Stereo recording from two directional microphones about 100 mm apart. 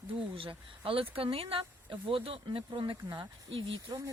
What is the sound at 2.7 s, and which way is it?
Speech, 50° right (ahead or behind).